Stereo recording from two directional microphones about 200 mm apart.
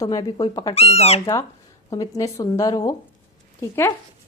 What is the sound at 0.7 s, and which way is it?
Speech, 30° left (ahead or behind).